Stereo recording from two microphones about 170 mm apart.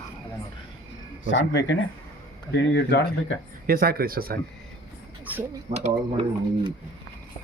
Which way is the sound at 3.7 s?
60° right (ahead or behind).